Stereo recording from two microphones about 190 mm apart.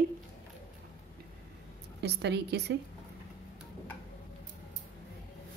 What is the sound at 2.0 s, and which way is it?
Speech, 65° right (ahead or behind).